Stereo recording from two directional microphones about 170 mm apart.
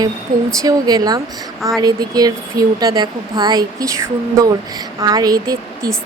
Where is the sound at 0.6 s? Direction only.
20° right (ahead or behind).